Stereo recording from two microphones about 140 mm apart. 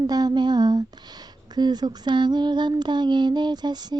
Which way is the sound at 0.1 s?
30° right (ahead or behind).